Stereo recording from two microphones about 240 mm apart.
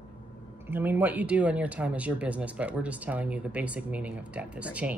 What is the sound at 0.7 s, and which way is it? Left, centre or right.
Speech, centre.